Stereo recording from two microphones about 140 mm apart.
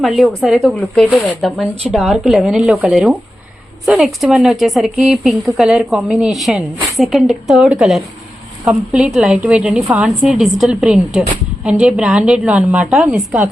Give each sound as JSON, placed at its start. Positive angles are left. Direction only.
{"t": 0.0, "sound": "a woman's voice", "side_deg": 0}